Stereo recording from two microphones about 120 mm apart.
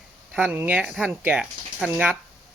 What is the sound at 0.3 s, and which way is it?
A man's voice, 10° right (ahead or behind).